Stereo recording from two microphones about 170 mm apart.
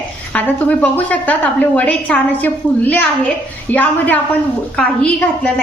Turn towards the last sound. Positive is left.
turn(degrees=10)  # may be behind; listen again after turning